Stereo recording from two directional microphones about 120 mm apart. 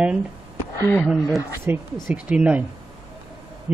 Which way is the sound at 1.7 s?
15° right (ahead or behind).